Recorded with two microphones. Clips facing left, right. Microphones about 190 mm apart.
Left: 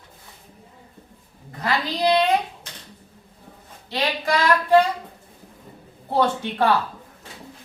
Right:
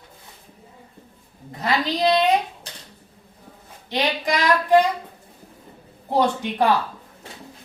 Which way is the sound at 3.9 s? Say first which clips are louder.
Even; 20° right (ahead or behind).